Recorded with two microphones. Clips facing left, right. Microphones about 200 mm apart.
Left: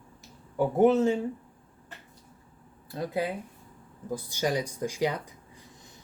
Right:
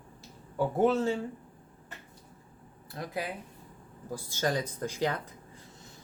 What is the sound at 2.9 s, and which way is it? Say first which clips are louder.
Speech: left 6 dB; 25° left (ahead or behind).